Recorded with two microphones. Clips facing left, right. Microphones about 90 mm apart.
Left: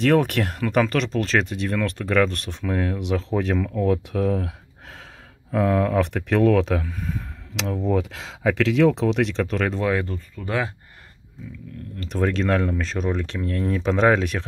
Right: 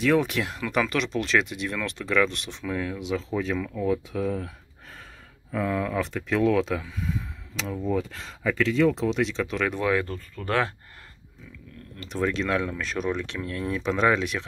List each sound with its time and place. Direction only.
0.0 s speech: 60° left (ahead or behind)
3.5 s speech: 50° left (ahead or behind)
3.9 s speech: 75° left (ahead or behind); by 5.0 s 90° left
5.5 s speech: 65° left (ahead or behind); by 7.2 s 50° left (ahead or behind)
7.5 s speech: 85° left; by 9.7 s 50° left (ahead or behind)
9.7 s speech: 25° left (ahead or behind)
10.4 s speech: 15° left (ahead or behind)
12.0 s speech: 50° left (ahead or behind); by 13.2 s 30° left (ahead or behind)
13.5 s speech: 45° left (ahead or behind)